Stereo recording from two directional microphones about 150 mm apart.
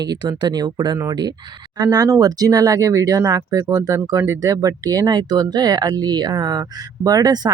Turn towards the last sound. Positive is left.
turn(degrees=-25)  # may be behind; listen again after turning